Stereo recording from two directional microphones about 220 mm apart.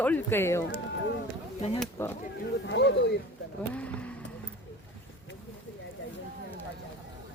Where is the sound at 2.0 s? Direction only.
10° left (ahead or behind).